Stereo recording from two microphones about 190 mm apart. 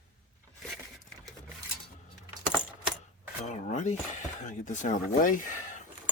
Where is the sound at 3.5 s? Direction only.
40° left (ahead or behind).